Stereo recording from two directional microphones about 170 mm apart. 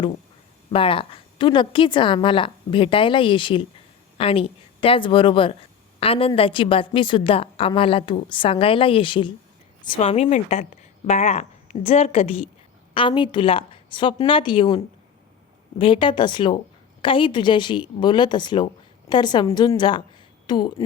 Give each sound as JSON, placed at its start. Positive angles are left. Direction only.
{"t": 0.7, "sound": "a woman's voice", "side_deg": 30}